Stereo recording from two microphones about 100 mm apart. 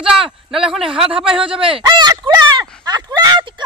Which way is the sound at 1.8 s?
50° right (ahead or behind).